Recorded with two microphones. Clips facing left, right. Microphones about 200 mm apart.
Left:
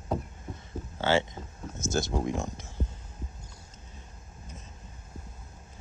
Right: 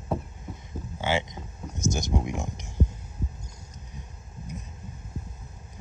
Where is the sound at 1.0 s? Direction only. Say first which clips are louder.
Left 2 dB; 15° right (ahead or behind).